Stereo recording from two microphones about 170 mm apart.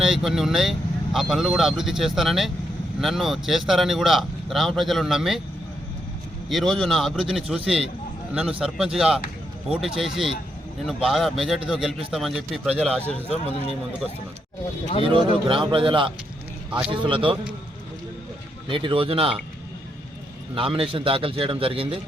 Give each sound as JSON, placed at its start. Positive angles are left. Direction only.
{"t": 0.0, "sound": "speech", "side_deg": 0}
{"t": 6.5, "sound": "speech", "side_deg": 0}
{"t": 13.1, "sound": "a man's voice", "side_deg": 35}
{"t": 15.0, "sound": "a man's voice", "side_deg": -30}
{"t": 18.7, "sound": "a man's voice", "side_deg": -30}
{"t": 20.6, "sound": "a man's voice", "side_deg": -30}